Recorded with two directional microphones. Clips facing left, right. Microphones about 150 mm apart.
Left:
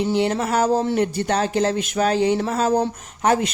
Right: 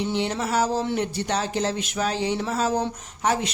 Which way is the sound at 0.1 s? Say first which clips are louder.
Left 5 dB; 45° left (ahead or behind).